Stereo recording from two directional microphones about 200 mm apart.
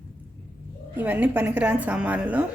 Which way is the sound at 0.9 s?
10° right (ahead or behind).